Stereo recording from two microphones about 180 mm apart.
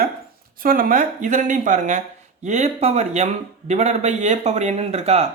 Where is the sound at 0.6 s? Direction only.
50° right (ahead or behind).